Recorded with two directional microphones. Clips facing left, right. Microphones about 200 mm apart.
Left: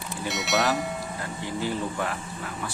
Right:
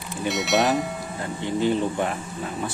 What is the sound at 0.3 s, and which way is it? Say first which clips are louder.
Speech: right 5 dB; centre (ahead or behind).